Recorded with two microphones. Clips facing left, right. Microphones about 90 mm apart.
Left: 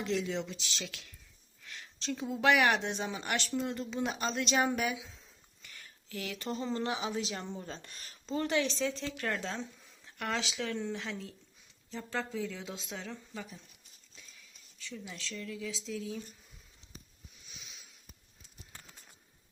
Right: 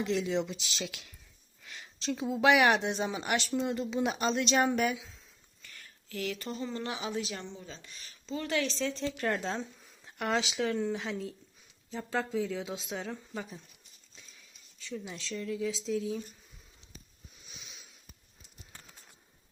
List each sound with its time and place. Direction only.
0.0 s speech: 5° right (ahead or behind)
5.6 s a sound: 10° left (ahead or behind)
6.4 s a woman's voice: 30° left (ahead or behind)
7.4 s speech: 50° left (ahead or behind)
8.4 s a woman's voice: 20° left (ahead or behind)
8.8 s speech: centre (ahead or behind)
9.3 s speech: 15° right (ahead or behind)
14.8 s speech: 25° right (ahead or behind)